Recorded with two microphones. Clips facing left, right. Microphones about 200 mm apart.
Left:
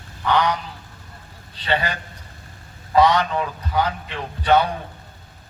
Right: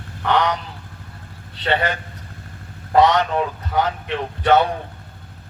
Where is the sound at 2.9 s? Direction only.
60° right (ahead or behind).